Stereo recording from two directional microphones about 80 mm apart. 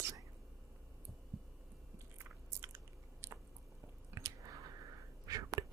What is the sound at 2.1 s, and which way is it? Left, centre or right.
Biting, right.